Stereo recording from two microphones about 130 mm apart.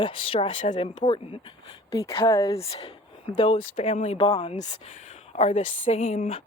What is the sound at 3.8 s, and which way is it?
Speech, 55° left (ahead or behind).